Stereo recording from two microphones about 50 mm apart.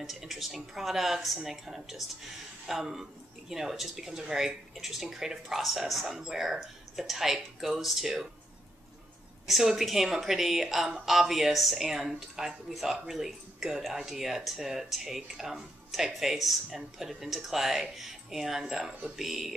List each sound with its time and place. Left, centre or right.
0.0 s speech: centre
9.5 s speech: centre